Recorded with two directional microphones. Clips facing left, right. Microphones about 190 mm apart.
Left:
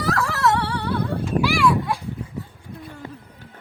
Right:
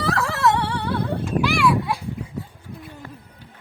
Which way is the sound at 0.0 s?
25° right (ahead or behind).